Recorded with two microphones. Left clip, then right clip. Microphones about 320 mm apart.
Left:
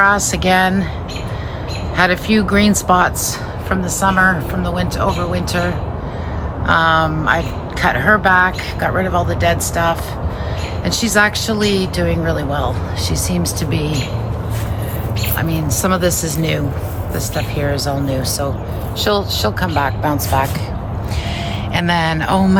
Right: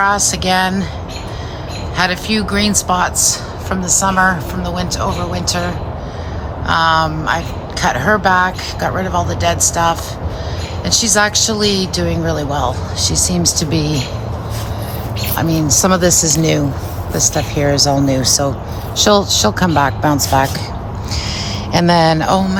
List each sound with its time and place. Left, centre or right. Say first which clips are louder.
0.0 s a woman's voice: left 1 dB; centre
2.0 s a woman's voice: left 2 dB; centre
6.7 s a woman's voice: even; centre
15.4 s a woman's voice: right 7 dB; centre
21.7 s a woman's voice: right 5 dB; centre